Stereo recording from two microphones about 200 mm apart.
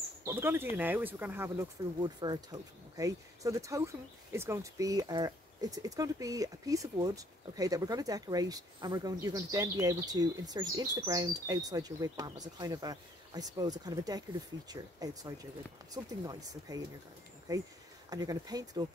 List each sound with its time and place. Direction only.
0.2 s speech: 10° right (ahead or behind)